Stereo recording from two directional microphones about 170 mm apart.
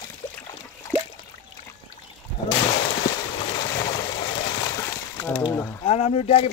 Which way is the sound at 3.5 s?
25° left (ahead or behind).